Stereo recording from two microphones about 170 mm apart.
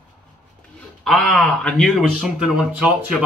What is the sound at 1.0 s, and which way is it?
Speech, 5° left (ahead or behind).